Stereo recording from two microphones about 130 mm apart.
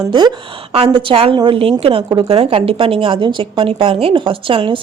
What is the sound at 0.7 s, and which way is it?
A woman's voice, 45° right (ahead or behind).